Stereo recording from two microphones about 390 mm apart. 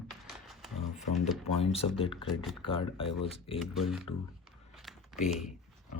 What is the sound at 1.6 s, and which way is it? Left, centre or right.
Speech, centre.